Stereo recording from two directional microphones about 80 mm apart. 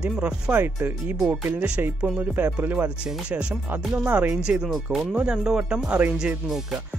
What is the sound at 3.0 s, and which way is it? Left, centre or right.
Speech, centre.